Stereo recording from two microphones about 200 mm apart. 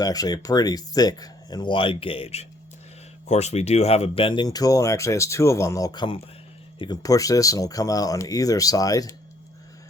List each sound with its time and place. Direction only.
0.0 s speech: 20° left (ahead or behind)